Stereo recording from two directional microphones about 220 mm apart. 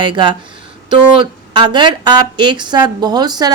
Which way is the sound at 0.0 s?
20° right (ahead or behind).